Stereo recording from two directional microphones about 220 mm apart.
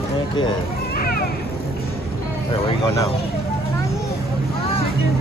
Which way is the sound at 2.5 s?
25° left (ahead or behind).